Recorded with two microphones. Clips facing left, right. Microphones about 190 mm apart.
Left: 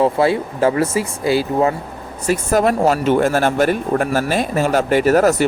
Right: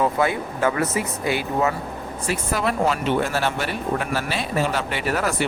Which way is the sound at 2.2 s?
45° left (ahead or behind).